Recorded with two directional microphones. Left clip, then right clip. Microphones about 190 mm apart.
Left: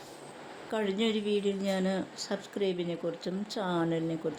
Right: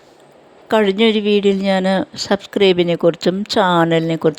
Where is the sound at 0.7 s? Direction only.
45° right (ahead or behind).